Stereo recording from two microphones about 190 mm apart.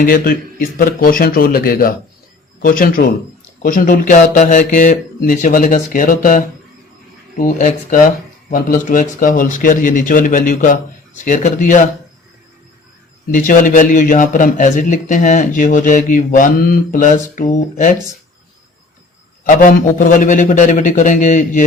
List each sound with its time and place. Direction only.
0.0 s a man's voice: 50° left (ahead or behind)
13.3 s a man's voice: 45° left (ahead or behind)
19.5 s a man's voice: 45° left (ahead or behind)